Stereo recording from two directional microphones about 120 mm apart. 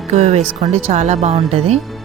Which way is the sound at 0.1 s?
60° right (ahead or behind).